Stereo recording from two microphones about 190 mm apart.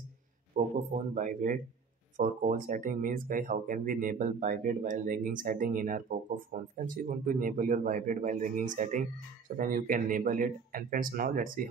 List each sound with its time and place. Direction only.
0.6 s a man's voice: 40° right (ahead or behind)